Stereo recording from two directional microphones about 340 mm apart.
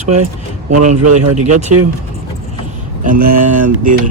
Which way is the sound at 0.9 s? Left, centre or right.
Right.